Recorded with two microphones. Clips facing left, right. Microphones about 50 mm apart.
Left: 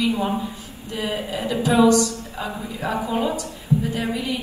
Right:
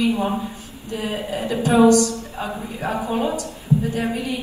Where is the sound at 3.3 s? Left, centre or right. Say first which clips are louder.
Right 1 dB; right.